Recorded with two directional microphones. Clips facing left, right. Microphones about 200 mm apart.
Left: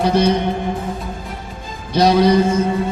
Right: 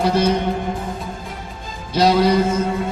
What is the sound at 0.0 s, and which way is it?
Music, 5° right (ahead or behind).